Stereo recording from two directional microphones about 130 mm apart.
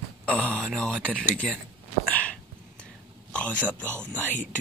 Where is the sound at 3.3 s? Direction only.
10° left (ahead or behind).